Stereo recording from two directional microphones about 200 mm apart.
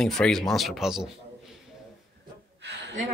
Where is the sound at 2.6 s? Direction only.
60° right (ahead or behind).